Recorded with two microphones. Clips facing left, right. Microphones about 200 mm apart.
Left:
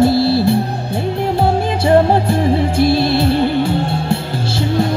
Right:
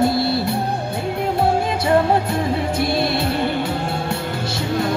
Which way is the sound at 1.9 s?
30° left (ahead or behind).